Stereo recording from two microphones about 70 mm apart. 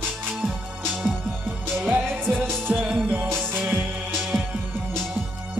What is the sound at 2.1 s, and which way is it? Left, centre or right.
Music, right.